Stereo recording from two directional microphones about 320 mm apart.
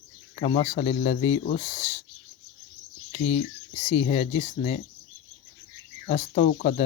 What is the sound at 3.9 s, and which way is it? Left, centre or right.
Speech, left.